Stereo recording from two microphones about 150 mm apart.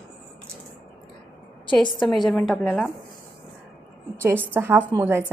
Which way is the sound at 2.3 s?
Centre (ahead or behind).